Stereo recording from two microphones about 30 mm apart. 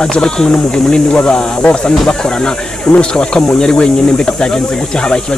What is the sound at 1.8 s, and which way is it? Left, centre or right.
Speech, left.